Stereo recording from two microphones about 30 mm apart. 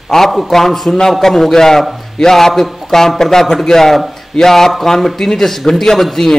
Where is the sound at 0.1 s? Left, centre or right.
Left.